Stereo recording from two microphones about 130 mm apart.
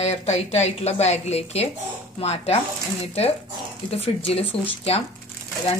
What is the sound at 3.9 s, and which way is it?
A woman's voice, 50° left (ahead or behind).